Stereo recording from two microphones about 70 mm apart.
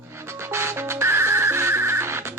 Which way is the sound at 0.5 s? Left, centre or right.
Right.